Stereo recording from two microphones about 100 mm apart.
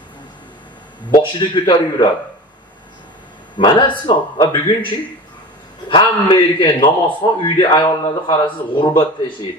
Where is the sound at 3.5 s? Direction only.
55° left (ahead or behind).